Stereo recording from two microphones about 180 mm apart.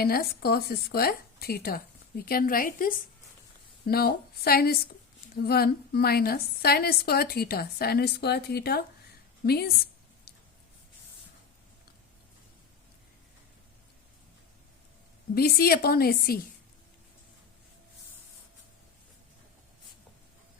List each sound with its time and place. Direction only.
0.0 s a woman's voice: 60° left (ahead or behind)
15.4 s a woman's voice: 60° left (ahead or behind)